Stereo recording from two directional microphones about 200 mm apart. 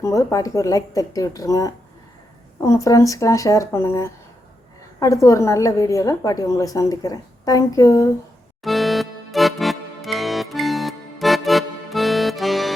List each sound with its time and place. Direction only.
0.0 s a woman's voice: 15° left (ahead or behind)
8.6 s music: centre (ahead or behind)